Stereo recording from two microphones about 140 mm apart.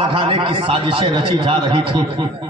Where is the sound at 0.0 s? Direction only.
40° right (ahead or behind).